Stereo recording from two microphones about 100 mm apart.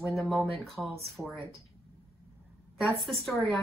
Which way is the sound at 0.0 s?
Centre (ahead or behind).